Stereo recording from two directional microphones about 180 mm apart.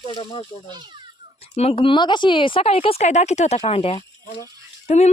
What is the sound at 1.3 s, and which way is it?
Speech, 35° left (ahead or behind).